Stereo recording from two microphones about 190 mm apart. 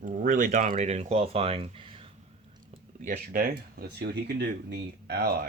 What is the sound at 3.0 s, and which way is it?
Speech, 45° right (ahead or behind).